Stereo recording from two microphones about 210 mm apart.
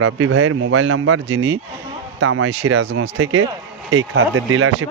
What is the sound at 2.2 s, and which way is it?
A man's voice, 90° right.